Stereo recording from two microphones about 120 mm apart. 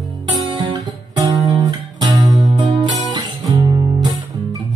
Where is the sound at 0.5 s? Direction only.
40° right (ahead or behind).